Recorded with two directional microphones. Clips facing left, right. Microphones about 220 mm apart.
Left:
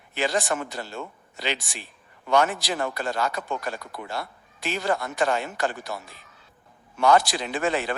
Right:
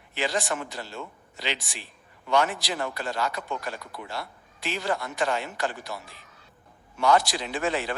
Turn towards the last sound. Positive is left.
turn(degrees=55)  # may be behind; listen again after turning